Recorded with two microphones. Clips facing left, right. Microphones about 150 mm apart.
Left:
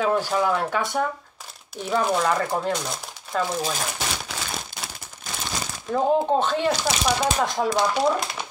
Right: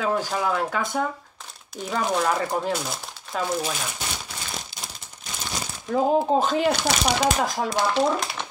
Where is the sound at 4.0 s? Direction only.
90° left.